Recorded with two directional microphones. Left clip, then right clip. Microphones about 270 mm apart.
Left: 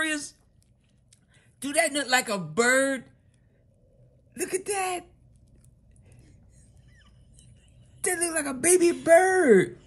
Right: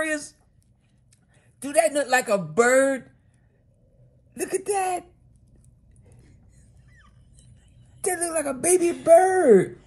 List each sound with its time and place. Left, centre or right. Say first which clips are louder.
0.0 s a sound: right 2 dB; centre
1.3 s a man's voice: right 5 dB; centre
4.4 s a woman's voice: right 4 dB; centre
8.0 s speech: right 3 dB; centre
9.2 s speech: right 3 dB; left